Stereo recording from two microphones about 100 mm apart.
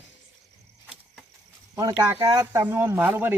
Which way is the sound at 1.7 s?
40° right (ahead or behind).